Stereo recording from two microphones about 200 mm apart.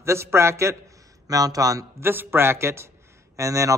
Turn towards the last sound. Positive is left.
turn(degrees=-15)  # may be behind; listen again after turning